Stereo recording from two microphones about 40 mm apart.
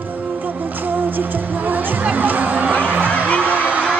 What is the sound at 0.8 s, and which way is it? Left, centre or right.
Music, right.